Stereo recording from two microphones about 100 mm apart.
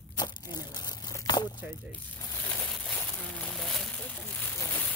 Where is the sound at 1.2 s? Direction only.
45° left (ahead or behind).